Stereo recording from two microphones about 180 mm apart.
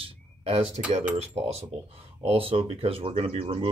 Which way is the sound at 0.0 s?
30° right (ahead or behind).